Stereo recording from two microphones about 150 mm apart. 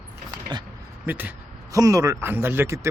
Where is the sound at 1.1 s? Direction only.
10° right (ahead or behind).